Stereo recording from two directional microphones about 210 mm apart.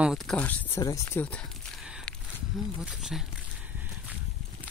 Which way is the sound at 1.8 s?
5° right (ahead or behind).